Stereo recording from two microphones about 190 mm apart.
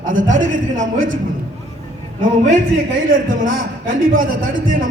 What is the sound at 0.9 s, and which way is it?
Speech, 90° right.